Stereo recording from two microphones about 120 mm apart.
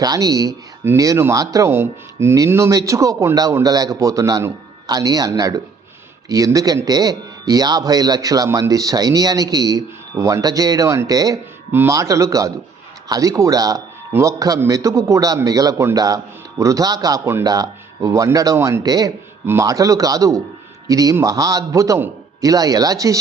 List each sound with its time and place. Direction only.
0.0 s a man's voice: 30° right (ahead or behind)